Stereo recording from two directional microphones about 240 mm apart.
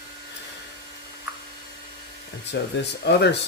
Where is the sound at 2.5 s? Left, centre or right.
Left.